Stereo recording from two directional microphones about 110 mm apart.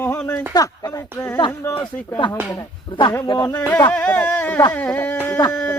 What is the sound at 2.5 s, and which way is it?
Speech, 40° left (ahead or behind).